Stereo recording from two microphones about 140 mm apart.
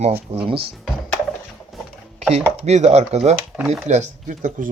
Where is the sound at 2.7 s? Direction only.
55° right (ahead or behind).